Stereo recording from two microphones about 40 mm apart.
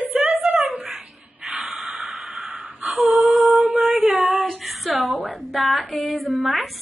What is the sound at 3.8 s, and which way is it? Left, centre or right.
Female singing, centre.